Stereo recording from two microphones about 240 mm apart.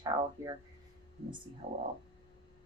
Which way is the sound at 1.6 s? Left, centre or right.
Right.